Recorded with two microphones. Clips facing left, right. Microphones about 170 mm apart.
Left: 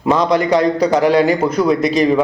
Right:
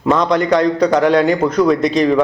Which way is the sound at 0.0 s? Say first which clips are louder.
Even; 5° left (ahead or behind).